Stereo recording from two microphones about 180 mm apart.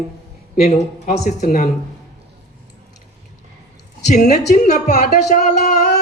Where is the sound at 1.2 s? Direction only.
45° left (ahead or behind).